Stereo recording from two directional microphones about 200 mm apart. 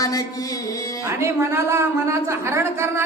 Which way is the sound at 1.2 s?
15° right (ahead or behind).